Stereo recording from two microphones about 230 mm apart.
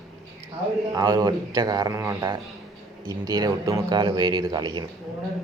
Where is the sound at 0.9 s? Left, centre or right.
Centre.